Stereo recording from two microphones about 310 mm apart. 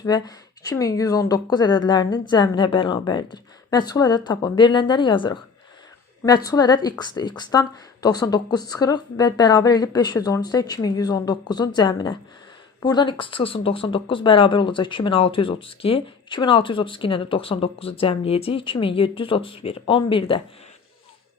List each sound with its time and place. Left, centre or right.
0.0 s speech: centre